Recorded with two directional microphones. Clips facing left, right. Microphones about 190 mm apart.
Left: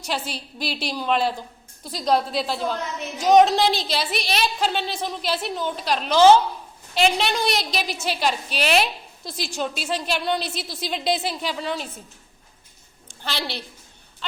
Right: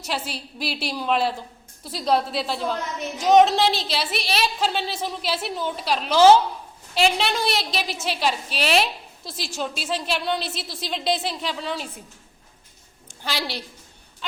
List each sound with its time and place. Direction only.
0.0 s a woman's voice: 5° right (ahead or behind)